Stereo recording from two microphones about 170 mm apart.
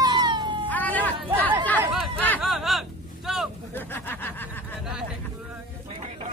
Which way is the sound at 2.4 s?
Centre (ahead or behind).